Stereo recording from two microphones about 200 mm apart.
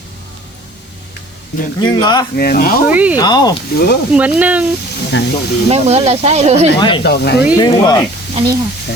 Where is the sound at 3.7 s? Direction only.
50° left (ahead or behind).